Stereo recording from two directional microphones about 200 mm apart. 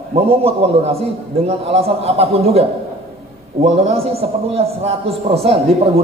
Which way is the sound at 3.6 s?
30° right (ahead or behind).